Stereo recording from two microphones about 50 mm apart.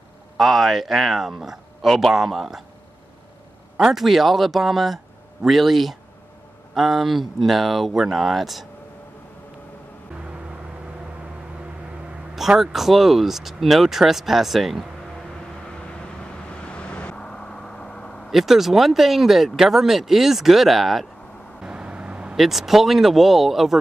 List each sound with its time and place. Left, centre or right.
0.4 s speech: centre
3.7 s speech: centre
12.4 s speech: centre
16.6 s vehicle: left
18.3 s speech: centre
21.5 s vehicle: centre
22.3 s speech: centre